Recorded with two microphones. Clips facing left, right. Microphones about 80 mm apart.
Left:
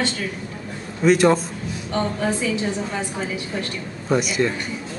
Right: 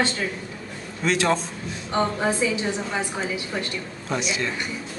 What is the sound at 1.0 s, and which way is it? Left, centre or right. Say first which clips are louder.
Speech: left 6 dB; centre.